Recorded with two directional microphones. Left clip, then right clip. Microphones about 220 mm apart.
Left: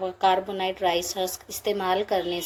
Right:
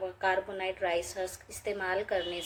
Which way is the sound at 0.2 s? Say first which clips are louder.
Left 8 dB; 30° left (ahead or behind).